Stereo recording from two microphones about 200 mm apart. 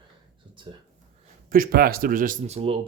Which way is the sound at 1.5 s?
45° right (ahead or behind).